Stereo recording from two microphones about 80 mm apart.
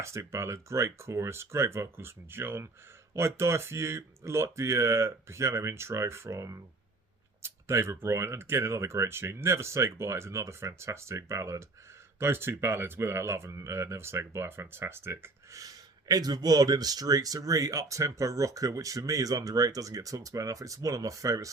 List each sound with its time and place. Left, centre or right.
0.0 s speech: right